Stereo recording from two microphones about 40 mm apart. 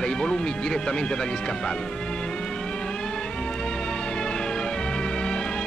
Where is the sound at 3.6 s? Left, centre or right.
Centre.